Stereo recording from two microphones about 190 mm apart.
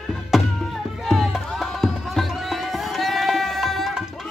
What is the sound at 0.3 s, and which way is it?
Music, centre (ahead or behind).